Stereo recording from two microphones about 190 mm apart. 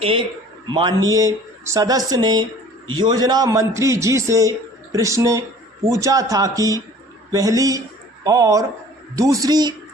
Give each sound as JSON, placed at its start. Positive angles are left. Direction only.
{"t": 0.0, "sound": "a man's voice", "side_deg": -30}